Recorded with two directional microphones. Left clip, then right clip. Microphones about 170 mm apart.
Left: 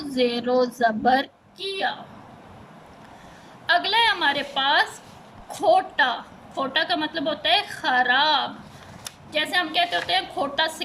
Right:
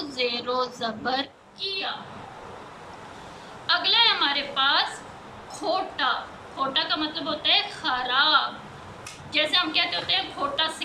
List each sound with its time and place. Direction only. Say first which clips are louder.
0.1 s a woman's voice: left 5 dB; 55° left (ahead or behind)
3.7 s a woman's voice: left 1 dB; 55° left (ahead or behind)